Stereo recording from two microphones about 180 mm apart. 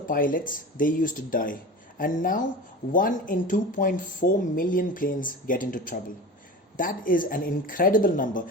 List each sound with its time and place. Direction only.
0.1 s speech: 50° left (ahead or behind)